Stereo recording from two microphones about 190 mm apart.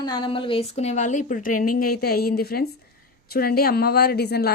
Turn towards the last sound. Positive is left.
turn(degrees=55)  # may be behind; listen again after turning